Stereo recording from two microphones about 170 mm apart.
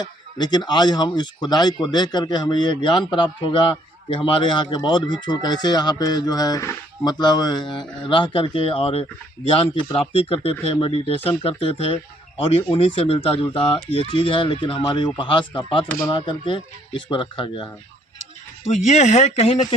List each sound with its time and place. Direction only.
0.0 s speech: 25° left (ahead or behind)
18.6 s speech: 40° left (ahead or behind)